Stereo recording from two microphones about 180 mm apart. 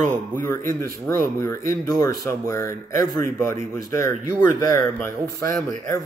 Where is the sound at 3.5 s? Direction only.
15° left (ahead or behind).